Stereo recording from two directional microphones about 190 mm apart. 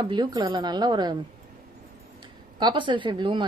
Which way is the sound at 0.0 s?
20° right (ahead or behind).